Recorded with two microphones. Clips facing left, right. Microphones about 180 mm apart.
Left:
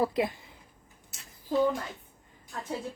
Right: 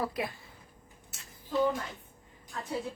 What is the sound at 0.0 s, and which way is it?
Speech, 25° left (ahead or behind).